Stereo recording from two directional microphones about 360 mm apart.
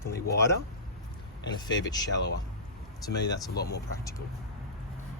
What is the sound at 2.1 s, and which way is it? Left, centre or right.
Speech, left.